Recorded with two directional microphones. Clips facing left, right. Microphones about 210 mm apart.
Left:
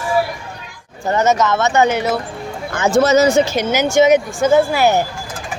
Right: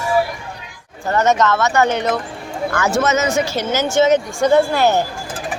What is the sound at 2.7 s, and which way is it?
Speech, 25° left (ahead or behind).